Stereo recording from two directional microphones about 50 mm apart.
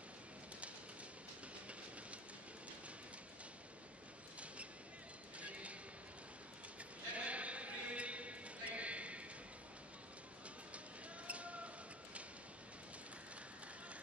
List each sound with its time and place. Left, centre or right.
5.4 s train: right
7.2 s a sound: right
11.2 s bird: right